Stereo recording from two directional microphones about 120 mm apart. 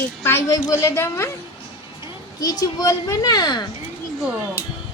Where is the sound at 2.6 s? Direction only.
30° left (ahead or behind).